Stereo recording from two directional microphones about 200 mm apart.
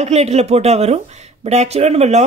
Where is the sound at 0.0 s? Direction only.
35° right (ahead or behind).